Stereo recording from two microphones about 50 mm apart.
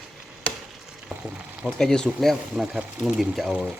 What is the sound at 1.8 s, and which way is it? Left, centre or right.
Speech, centre.